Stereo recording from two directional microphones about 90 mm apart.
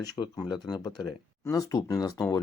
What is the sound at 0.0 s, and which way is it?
Speech, 45° left (ahead or behind).